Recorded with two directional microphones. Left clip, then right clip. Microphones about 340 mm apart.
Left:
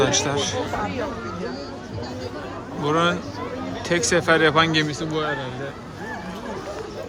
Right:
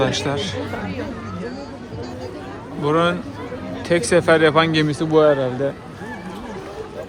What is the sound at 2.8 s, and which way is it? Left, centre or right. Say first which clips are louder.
A man's voice: right 3 dB; centre.